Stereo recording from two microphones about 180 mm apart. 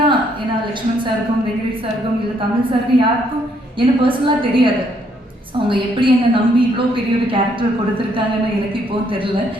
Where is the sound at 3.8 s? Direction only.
30° right (ahead or behind).